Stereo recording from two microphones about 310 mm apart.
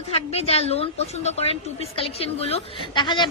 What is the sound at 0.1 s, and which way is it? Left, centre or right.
A woman's voice, centre.